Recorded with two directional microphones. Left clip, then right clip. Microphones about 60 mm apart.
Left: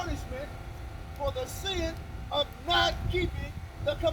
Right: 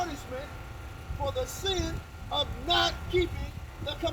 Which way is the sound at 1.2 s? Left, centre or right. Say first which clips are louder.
Right 2 dB; right.